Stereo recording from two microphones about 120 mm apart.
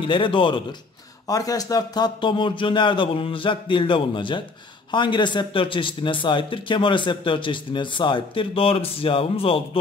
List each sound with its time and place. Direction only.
0.0 s a man's voice: 45° left (ahead or behind)
1.2 s a man's voice: 30° left (ahead or behind); by 9.6 s 50° left (ahead or behind)